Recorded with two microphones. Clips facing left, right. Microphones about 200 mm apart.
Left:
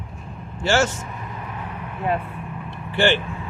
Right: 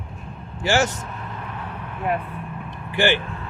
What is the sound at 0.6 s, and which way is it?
Speech, 15° right (ahead or behind).